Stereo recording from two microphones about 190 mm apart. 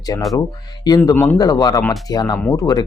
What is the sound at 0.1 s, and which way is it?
Speech, 20° left (ahead or behind).